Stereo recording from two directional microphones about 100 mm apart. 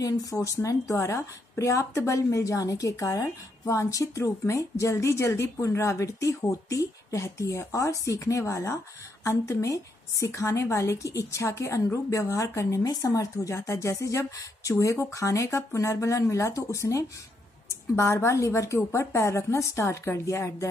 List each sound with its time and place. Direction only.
0.0 s a woman's voice: 35° left (ahead or behind)